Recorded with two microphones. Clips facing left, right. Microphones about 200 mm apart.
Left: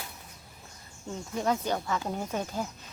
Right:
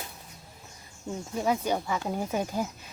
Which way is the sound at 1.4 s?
10° right (ahead or behind).